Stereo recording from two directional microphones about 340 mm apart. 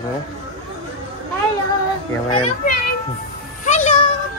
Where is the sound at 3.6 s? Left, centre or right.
Left.